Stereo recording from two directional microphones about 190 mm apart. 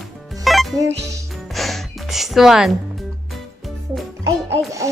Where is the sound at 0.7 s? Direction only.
15° right (ahead or behind).